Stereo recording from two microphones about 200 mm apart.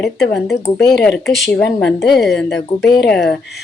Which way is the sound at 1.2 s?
Centre (ahead or behind).